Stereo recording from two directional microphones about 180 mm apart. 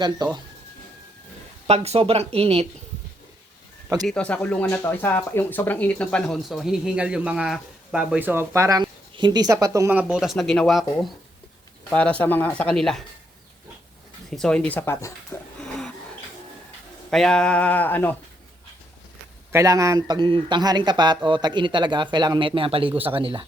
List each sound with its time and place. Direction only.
0.2 s speech: 25° right (ahead or behind)
1.6 s speech: 35° right (ahead or behind)
4.0 s speech: 5° left (ahead or behind)
14.3 s speech: 5° left (ahead or behind)
17.1 s speech: 5° left (ahead or behind)
19.5 s speech: 15° right (ahead or behind)